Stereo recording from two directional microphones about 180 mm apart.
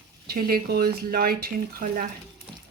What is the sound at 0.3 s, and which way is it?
Speech, 55° right (ahead or behind).